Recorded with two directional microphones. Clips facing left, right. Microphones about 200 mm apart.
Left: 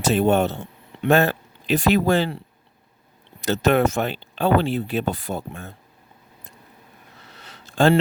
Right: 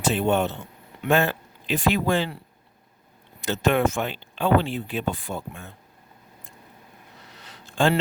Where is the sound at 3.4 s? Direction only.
40° left (ahead or behind).